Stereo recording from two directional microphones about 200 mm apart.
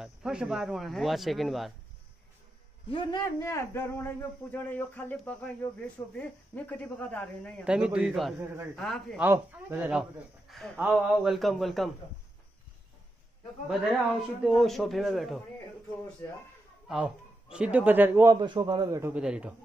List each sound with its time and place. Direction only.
0.0 s speech: 5° right (ahead or behind)
2.9 s a man's voice: 20° left (ahead or behind); by 9.2 s centre (ahead or behind)
9.2 s a man's voice: 10° right (ahead or behind)
14.4 s speech: centre (ahead or behind)
16.8 s a man's voice: 5° right (ahead or behind)
18.4 s a man's voice: 25° right (ahead or behind); by 19.5 s 5° right (ahead or behind)